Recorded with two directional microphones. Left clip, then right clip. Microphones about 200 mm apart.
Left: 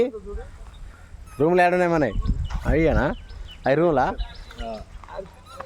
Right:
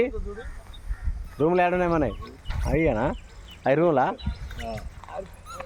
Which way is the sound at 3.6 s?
25° left (ahead or behind).